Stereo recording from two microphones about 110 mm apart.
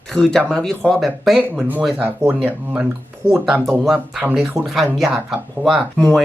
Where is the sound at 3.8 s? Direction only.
Centre (ahead or behind).